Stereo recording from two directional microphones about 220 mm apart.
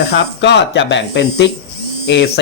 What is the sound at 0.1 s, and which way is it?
Speech, 50° left (ahead or behind).